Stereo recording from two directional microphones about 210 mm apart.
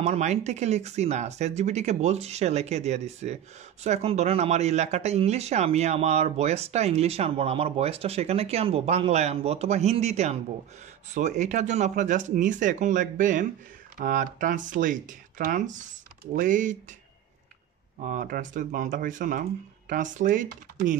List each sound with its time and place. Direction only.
0.0 s speech: 35° right (ahead or behind)
18.0 s speech: 40° right (ahead or behind)